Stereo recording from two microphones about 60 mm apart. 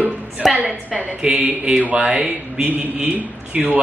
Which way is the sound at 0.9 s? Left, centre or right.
Centre.